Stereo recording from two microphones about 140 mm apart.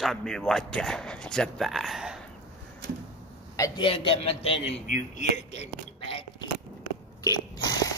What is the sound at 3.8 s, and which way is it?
Speech, 40° left (ahead or behind).